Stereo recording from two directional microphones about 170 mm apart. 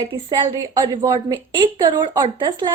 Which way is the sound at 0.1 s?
25° right (ahead or behind).